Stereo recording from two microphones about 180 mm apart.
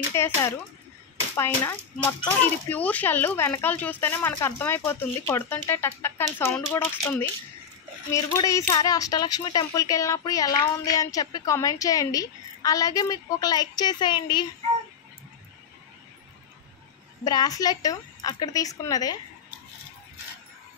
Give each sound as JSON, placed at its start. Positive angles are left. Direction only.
{"t": 0.1, "sound": "speech", "side_deg": 15}
{"t": 17.2, "sound": "speech", "side_deg": 20}